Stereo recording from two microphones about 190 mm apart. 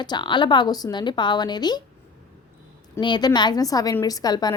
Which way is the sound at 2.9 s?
25° left (ahead or behind).